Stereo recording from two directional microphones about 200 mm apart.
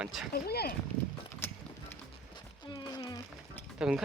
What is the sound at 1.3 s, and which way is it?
Music, 10° left (ahead or behind).